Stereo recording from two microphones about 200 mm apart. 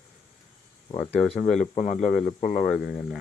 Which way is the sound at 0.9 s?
Centre (ahead or behind).